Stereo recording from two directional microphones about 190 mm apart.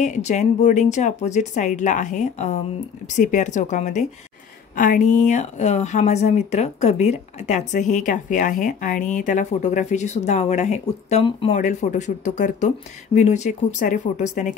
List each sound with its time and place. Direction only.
0.0 s speech: 40° left (ahead or behind)